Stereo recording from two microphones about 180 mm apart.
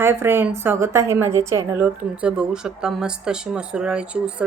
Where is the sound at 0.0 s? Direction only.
15° right (ahead or behind).